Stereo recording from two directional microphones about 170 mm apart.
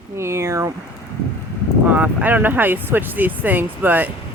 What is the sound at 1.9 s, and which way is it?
Speech, 10° right (ahead or behind).